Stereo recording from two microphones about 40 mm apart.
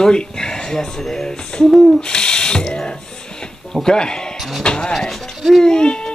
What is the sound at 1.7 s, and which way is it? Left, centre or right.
Owl, centre.